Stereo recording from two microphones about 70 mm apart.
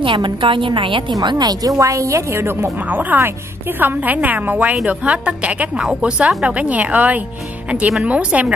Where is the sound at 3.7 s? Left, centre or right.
Right.